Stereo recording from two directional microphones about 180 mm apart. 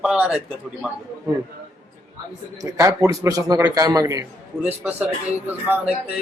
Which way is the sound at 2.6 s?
15° right (ahead or behind).